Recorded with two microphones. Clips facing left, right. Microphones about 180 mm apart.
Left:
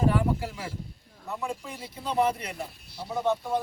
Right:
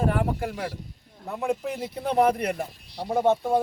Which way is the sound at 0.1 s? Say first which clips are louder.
Right 1 dB; 55° right (ahead or behind).